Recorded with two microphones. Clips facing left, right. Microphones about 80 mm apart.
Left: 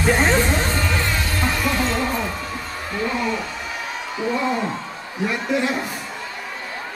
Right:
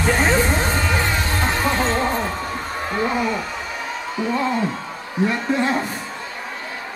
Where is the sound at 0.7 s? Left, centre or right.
Right.